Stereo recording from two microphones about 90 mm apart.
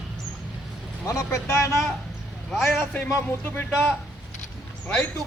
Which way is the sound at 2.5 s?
Centre (ahead or behind).